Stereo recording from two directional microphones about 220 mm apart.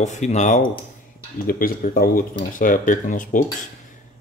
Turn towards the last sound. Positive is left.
turn(degrees=35)  # may be behind; listen again after turning